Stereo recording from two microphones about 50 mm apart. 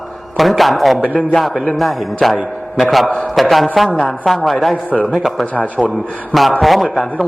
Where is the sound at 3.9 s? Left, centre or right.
Left.